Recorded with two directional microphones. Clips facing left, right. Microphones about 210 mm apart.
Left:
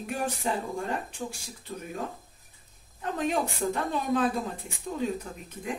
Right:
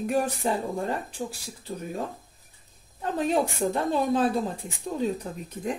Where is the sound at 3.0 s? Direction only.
35° right (ahead or behind).